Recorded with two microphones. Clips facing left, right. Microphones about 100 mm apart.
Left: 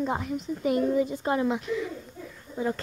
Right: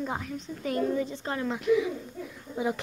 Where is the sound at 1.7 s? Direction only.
10° right (ahead or behind).